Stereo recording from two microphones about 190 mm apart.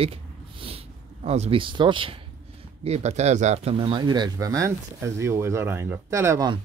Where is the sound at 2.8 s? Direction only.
35° right (ahead or behind); by 6.5 s 15° right (ahead or behind).